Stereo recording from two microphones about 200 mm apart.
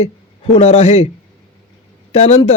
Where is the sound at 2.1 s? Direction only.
30° left (ahead or behind).